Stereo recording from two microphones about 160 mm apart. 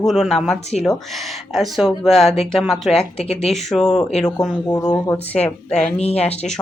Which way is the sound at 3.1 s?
40° left (ahead or behind).